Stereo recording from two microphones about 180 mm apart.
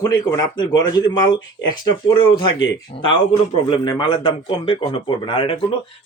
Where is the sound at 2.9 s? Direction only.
30° left (ahead or behind).